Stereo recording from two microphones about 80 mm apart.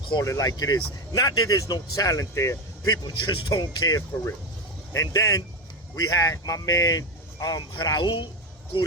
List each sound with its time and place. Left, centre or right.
0.2 s speech: left
2.8 s speech: left
4.9 s speech: left